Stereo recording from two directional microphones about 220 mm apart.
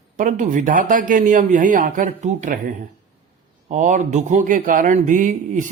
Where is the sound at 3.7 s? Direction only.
35° right (ahead or behind).